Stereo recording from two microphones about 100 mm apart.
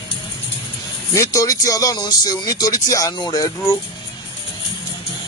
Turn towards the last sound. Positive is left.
turn(degrees=40)  # may be behind; listen again after turning